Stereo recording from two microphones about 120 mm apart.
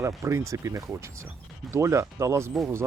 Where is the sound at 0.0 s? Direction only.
25° right (ahead or behind).